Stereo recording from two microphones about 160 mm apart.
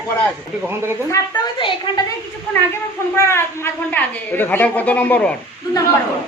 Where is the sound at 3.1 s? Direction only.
15° left (ahead or behind).